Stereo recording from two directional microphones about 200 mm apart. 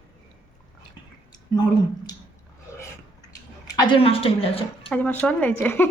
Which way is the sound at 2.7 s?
15° left (ahead or behind).